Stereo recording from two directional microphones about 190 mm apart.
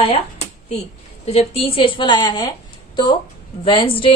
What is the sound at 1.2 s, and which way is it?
A woman's voice, 30° left (ahead or behind).